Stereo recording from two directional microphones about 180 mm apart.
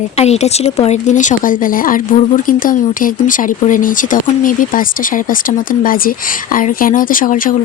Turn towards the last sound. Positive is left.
turn(degrees=50)  # may be behind; listen again after turning